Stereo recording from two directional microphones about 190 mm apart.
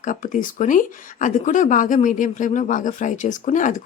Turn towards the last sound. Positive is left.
turn(degrees=40)  # may be behind; listen again after turning